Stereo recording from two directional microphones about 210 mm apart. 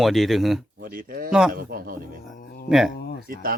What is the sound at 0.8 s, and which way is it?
Speech, 45° right (ahead or behind).